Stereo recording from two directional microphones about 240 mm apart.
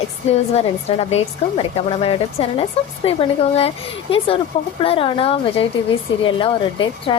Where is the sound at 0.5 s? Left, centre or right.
Left.